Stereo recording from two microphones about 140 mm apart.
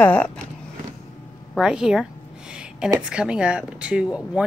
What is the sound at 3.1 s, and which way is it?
Speech, 5° right (ahead or behind).